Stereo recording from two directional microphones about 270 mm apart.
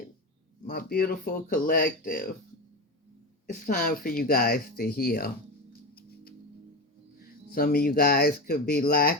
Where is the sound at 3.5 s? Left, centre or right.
Left.